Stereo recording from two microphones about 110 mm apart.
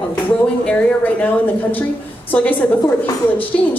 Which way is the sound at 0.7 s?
10° left (ahead or behind).